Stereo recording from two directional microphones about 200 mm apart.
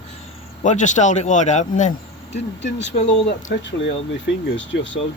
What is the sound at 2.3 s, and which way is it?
Speech, 60° left (ahead or behind).